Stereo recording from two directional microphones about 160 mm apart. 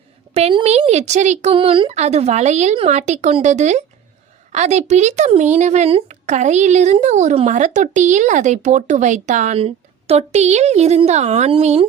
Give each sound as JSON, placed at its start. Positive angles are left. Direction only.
{"t": 0.3, "sound": "a woman's voice", "side_deg": -40}